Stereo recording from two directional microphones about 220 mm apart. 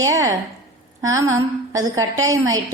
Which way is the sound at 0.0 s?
15° right (ahead or behind).